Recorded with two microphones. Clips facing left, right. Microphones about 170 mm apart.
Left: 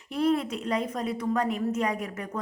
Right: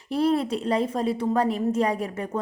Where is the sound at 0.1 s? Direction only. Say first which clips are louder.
Right 3 dB; 35° right (ahead or behind).